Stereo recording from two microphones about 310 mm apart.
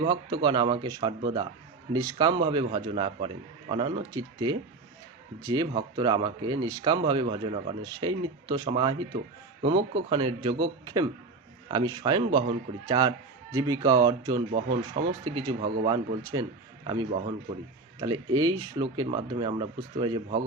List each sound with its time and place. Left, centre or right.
0.0 s speech: centre